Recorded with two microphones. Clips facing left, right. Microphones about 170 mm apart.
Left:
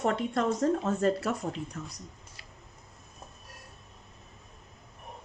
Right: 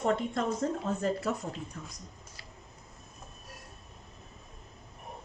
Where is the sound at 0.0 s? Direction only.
70° left (ahead or behind).